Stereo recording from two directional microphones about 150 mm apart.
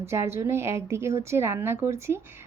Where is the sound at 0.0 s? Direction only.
20° right (ahead or behind).